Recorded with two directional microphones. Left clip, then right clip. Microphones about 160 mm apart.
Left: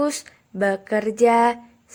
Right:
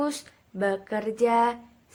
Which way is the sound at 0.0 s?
35° left (ahead or behind).